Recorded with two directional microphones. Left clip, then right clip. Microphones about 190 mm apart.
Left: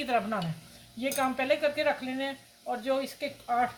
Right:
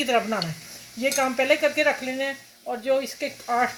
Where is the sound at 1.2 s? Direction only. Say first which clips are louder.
Right 5 dB; 40° right (ahead or behind).